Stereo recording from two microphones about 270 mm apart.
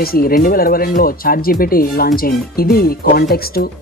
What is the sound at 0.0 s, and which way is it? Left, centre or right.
Speech, left.